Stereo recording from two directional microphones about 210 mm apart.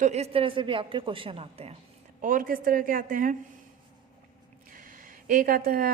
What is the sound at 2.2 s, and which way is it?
A woman's voice, 40° right (ahead or behind).